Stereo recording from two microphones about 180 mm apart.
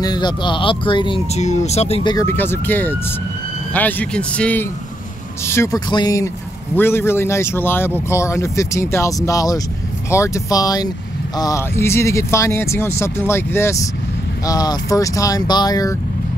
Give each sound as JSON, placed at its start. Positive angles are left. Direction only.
{"t": 0.0, "sound": "speech", "side_deg": 25}
{"t": 2.1, "sound": "speech", "side_deg": 10}